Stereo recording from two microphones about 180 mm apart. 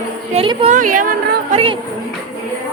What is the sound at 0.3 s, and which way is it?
Speech, 35° right (ahead or behind).